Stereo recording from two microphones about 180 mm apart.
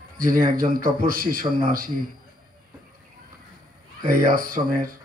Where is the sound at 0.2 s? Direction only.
50° right (ahead or behind).